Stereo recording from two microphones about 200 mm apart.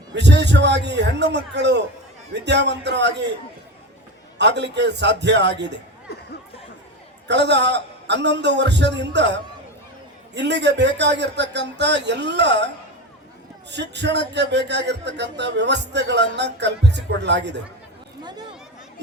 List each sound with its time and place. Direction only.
0.1 s speech: 60° right (ahead or behind)
4.4 s speech: 60° right (ahead or behind)
6.1 s chatter: 55° left (ahead or behind)
7.3 s speech: 60° right (ahead or behind)
13.7 s speech: 60° right (ahead or behind)